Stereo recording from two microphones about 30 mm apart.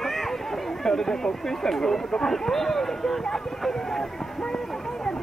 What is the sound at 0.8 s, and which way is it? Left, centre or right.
Speech, centre.